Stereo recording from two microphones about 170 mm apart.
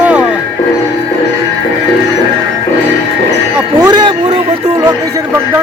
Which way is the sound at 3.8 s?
25° right (ahead or behind).